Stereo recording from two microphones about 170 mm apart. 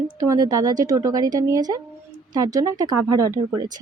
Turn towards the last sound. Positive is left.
turn(degrees=-20)  # may be behind; listen again after turning